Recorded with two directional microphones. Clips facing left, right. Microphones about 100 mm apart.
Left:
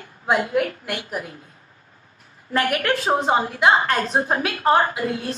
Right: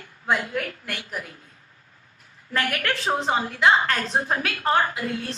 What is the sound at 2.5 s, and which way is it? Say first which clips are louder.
A woman's voice: left 5 dB; 25° left (ahead or behind).